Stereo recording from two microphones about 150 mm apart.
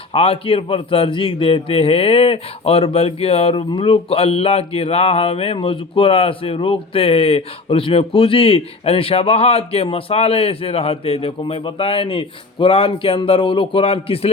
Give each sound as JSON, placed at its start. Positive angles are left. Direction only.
{"t": 0.1, "sound": "a man's voice", "side_deg": 40}